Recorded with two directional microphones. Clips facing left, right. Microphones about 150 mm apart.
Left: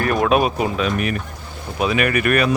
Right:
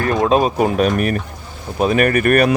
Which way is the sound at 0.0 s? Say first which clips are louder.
Right 2 dB; 25° right (ahead or behind).